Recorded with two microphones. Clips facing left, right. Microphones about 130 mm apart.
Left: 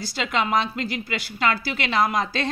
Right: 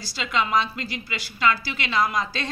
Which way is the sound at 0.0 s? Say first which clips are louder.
Left 1 dB; 55° left (ahead or behind).